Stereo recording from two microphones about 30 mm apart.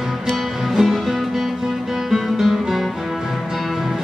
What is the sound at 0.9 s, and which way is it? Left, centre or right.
Music, centre.